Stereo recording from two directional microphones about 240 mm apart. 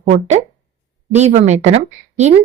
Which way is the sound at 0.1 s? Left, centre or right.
Right.